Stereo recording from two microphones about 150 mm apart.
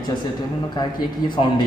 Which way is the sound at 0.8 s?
30° left (ahead or behind).